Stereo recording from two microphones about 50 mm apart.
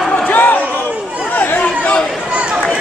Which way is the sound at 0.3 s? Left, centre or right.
Left.